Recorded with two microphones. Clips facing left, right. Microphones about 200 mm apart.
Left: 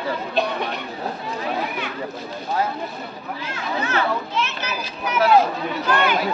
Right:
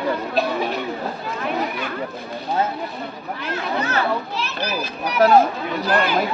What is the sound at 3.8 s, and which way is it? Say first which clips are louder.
A child's voice: left 2 dB; 35° right (ahead or behind).